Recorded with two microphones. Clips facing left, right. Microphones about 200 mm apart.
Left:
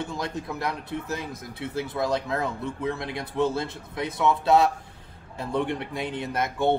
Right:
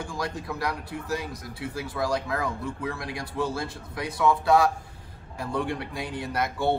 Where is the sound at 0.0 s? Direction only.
20° left (ahead or behind).